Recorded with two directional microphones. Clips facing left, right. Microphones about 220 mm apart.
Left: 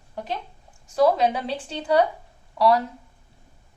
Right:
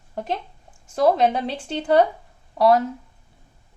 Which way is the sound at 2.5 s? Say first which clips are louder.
Right 3 dB; 50° right (ahead or behind).